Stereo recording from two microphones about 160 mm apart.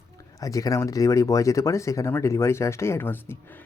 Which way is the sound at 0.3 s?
20° left (ahead or behind).